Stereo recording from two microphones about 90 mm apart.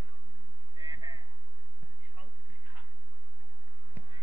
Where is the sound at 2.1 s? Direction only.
20° right (ahead or behind).